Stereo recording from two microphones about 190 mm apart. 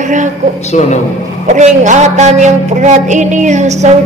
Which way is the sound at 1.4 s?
40° right (ahead or behind).